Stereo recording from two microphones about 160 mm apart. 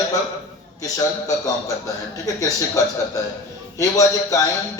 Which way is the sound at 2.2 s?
20° left (ahead or behind).